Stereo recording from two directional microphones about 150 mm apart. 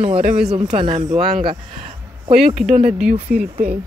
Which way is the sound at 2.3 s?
Centre (ahead or behind).